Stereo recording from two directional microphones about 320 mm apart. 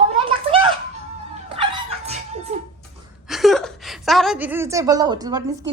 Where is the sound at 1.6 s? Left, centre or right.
Centre.